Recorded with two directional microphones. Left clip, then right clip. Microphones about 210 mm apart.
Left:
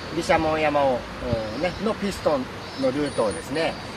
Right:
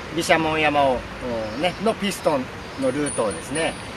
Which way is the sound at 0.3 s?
55° right (ahead or behind).